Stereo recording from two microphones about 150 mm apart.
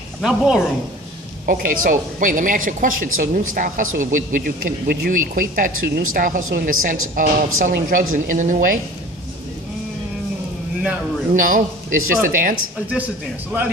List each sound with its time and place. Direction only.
0.2 s speech: 5° right (ahead or behind)
1.4 s speech: 70° right (ahead or behind)
11.3 s speech: 65° right (ahead or behind)